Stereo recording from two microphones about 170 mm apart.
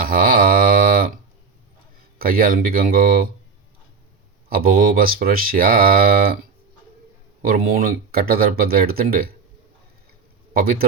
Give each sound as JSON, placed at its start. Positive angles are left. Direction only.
{"t": 0.0, "sound": "mantra", "side_deg": -60}
{"t": 2.1, "sound": "speech", "side_deg": -60}
{"t": 4.4, "sound": "speech", "side_deg": -60}
{"t": 7.4, "sound": "speech", "side_deg": -60}
{"t": 10.5, "sound": "speech", "side_deg": -60}